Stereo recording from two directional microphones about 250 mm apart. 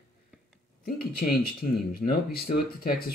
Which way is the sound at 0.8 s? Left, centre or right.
Left.